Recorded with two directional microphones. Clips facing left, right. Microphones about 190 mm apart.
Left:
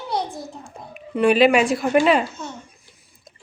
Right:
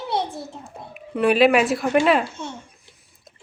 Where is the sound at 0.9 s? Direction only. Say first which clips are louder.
Left 2 dB; centre (ahead or behind).